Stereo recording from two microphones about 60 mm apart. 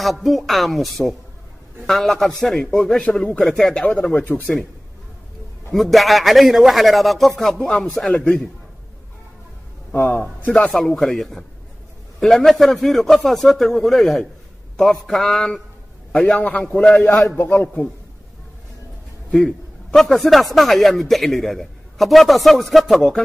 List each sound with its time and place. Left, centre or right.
0.0 s a man's voice: centre
3.8 s a man's voice: left
5.7 s a man's voice: centre
9.9 s a man's voice: left
11.0 s a man's voice: centre
16.1 s a man's voice: left
17.4 s a man's voice: left
19.3 s a man's voice: centre